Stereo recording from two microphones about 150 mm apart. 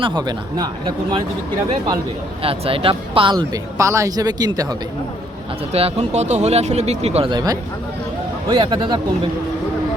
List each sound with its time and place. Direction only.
0.0 s speech: 30° right (ahead or behind)
2.4 s speech: 40° right (ahead or behind)
5.7 s speech: 45° right (ahead or behind)
7.3 s a man's voice: 25° right (ahead or behind)